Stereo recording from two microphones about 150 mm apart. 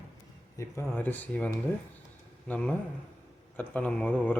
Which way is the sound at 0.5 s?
20° left (ahead or behind).